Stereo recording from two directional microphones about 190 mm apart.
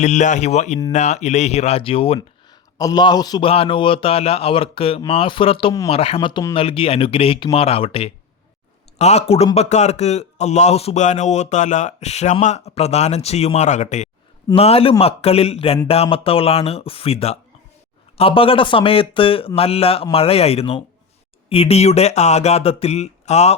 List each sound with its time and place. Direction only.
0.0 s a man's voice: 40° left (ahead or behind)